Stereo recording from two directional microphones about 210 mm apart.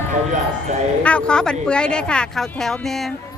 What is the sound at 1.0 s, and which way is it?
Speech, 5° left (ahead or behind).